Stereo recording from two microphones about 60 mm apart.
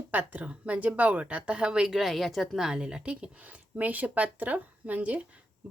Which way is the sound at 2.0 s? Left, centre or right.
Centre.